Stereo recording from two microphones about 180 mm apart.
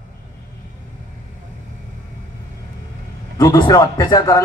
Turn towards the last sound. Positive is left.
turn(degrees=20)  # may be behind; listen again after turning